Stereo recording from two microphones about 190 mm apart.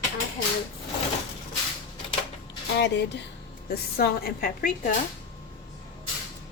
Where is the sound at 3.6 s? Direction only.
55° left (ahead or behind).